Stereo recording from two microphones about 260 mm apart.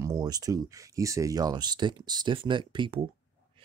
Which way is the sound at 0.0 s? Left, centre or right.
Centre.